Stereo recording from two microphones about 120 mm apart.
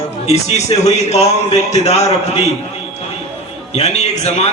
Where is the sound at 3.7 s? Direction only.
65° left (ahead or behind).